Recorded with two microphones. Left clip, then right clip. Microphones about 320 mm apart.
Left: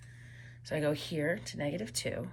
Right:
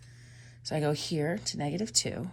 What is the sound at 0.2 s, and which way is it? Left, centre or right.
Speech, centre.